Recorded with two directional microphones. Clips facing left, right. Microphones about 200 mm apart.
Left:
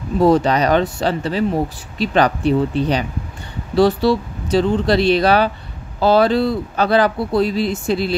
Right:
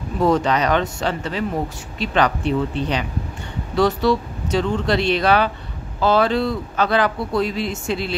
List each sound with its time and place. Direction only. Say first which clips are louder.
0.2 s speech: left 4 dB; 35° left (ahead or behind)